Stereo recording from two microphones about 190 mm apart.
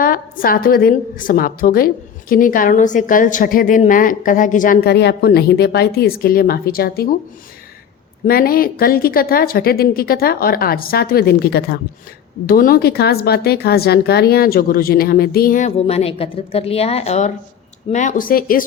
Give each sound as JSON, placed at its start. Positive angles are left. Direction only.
{"t": 0.0, "sound": "a woman's voice", "side_deg": 50}
{"t": 8.2, "sound": "a woman's voice", "side_deg": 50}